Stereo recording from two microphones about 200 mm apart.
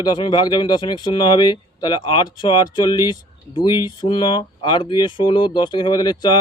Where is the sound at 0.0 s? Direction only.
20° left (ahead or behind).